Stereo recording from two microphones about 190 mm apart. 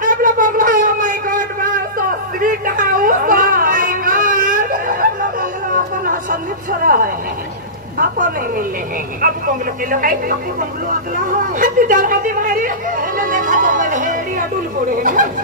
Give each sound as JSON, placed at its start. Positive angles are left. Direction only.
{"t": 0.0, "sound": "a sound", "side_deg": -45}
{"t": 6.8, "sound": "a sound", "side_deg": -45}
{"t": 9.2, "sound": "speech", "side_deg": -45}
{"t": 11.3, "sound": "speech", "side_deg": -45}
{"t": 13.2, "sound": "music", "side_deg": -45}
{"t": 14.9, "sound": "speech", "side_deg": -45}